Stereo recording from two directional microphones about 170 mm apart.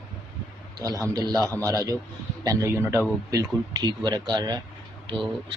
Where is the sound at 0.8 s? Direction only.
20° right (ahead or behind).